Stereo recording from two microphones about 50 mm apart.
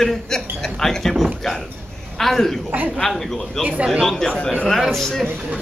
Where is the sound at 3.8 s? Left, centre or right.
Centre.